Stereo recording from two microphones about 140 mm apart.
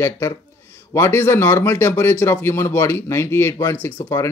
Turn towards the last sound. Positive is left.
turn(degrees=15)  # may be behind; listen again after turning